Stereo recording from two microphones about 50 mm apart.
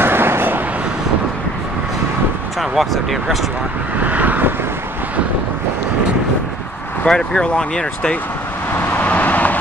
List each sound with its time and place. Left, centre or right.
0.0 s vehicle: right
2.6 s speech: centre
4.0 s vehicle: right
7.1 s speech: centre
8.7 s vehicle: left